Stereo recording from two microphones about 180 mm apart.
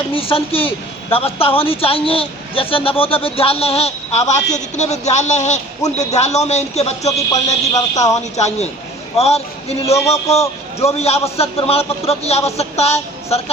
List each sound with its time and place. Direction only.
0.1 s speech: 30° left (ahead or behind)
7.7 s a woman's voice: 20° left (ahead or behind)
8.4 s speech: 40° left (ahead or behind)
9.9 s a man's voice: 15° left (ahead or behind)
10.8 s speech: 35° left (ahead or behind)